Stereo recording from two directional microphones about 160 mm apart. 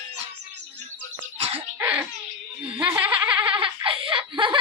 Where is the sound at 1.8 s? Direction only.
10° right (ahead or behind).